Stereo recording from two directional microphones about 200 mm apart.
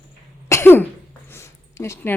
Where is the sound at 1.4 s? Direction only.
15° left (ahead or behind).